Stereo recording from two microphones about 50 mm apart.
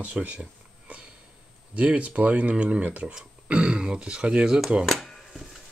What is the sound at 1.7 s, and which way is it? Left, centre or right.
Speech, right.